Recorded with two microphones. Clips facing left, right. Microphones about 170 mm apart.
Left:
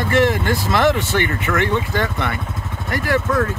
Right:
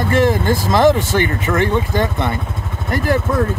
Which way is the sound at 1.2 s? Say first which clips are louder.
Right 3 dB; 30° right (ahead or behind).